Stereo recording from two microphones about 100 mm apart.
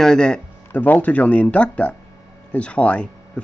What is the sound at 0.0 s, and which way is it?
Speech, 5° left (ahead or behind).